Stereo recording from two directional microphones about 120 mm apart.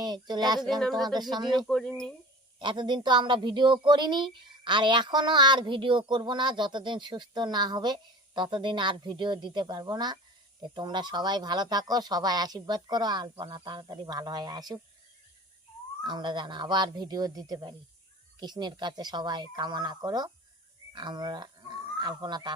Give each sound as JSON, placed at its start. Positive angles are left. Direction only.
{"t": 0.0, "sound": "a woman's voice", "side_deg": -35}
{"t": 0.8, "sound": "speech", "side_deg": 5}
{"t": 1.0, "sound": "a woman's voice", "side_deg": -35}
{"t": 1.6, "sound": "speech", "side_deg": 5}
{"t": 2.6, "sound": "a woman's voice", "side_deg": -40}
{"t": 16.0, "sound": "a woman's voice", "side_deg": -40}